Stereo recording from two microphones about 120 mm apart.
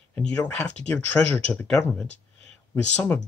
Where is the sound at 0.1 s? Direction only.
10° left (ahead or behind).